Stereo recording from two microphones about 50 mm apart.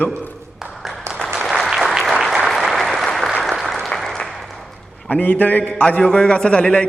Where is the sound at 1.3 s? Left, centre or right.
Centre.